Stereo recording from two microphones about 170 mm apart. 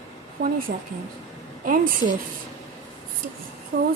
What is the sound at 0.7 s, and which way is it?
Speech, 65° right (ahead or behind).